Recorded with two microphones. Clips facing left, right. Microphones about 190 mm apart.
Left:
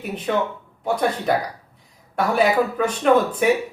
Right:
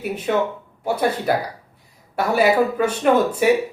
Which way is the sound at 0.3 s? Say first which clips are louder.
Right 1 dB; 5° right (ahead or behind).